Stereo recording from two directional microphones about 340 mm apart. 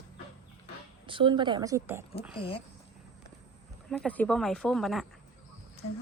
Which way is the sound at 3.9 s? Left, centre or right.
Centre.